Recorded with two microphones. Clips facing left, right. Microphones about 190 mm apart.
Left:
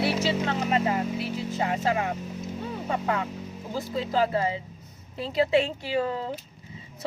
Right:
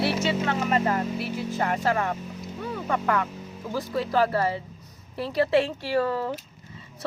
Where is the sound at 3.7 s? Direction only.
20° left (ahead or behind).